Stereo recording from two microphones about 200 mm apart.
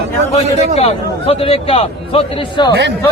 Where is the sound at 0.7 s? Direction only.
30° left (ahead or behind).